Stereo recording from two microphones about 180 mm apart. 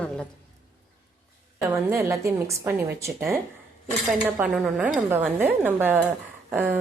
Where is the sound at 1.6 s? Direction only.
15° right (ahead or behind).